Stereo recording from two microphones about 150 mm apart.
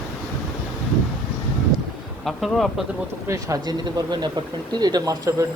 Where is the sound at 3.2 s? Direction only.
20° right (ahead or behind).